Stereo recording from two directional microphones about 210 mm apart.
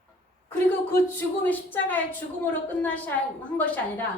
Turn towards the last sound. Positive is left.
turn(degrees=5)  # may be behind; listen again after turning